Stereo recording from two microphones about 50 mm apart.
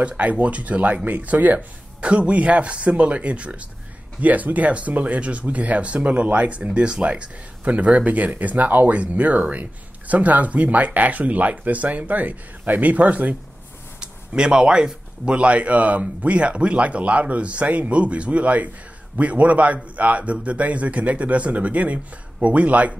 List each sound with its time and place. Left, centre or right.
0.2 s speech: right
13.9 s speech: centre